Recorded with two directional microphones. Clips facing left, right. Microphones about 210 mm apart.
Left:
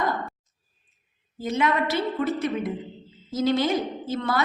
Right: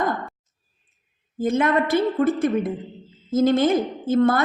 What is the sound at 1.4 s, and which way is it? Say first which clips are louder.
A woman's voice: right 4 dB; 50° right (ahead or behind).